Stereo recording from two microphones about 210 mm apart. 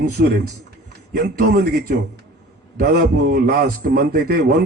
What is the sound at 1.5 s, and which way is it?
A man's voice, 50° right (ahead or behind).